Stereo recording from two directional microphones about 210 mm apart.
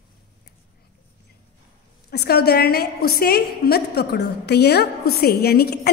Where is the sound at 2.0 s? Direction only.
50° left (ahead or behind).